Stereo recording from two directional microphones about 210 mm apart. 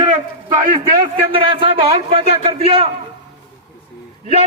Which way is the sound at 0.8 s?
25° right (ahead or behind).